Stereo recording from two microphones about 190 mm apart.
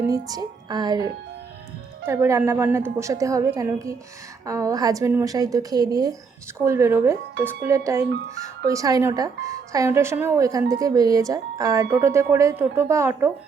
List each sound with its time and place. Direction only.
0.1 s a woman's voice: 20° right (ahead or behind)